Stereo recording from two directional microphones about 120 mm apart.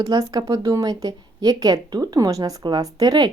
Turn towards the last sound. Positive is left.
turn(degrees=-35)  # may be behind; listen again after turning